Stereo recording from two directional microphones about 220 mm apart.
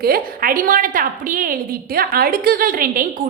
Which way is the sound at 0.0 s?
40° right (ahead or behind).